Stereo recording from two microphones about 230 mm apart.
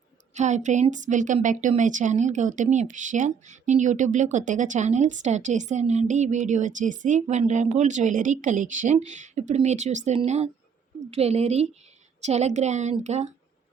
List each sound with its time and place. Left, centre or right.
0.3 s a woman's voice: right